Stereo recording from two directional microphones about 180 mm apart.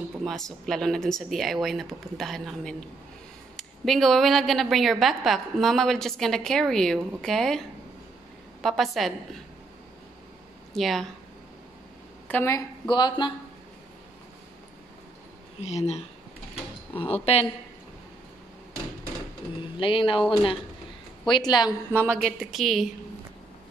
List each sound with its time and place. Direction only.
0.2 s a woman's voice: centre (ahead or behind)
10.7 s speech: centre (ahead or behind)
12.3 s speech: 15° left (ahead or behind)
15.6 s speech: 40° left (ahead or behind)
17.1 s speech: 35° left (ahead or behind)
19.8 s speech: 30° left (ahead or behind)
22.1 s a woman's voice: centre (ahead or behind)